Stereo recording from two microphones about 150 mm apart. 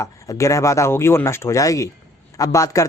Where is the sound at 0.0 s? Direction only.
20° left (ahead or behind).